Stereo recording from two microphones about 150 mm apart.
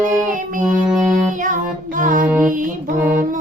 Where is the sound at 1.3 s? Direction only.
60° right (ahead or behind).